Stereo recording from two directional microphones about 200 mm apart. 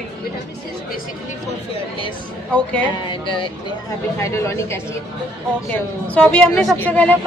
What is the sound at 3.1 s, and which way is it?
Speech, 25° left (ahead or behind).